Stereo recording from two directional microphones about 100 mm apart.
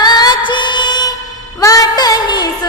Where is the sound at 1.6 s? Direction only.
35° left (ahead or behind).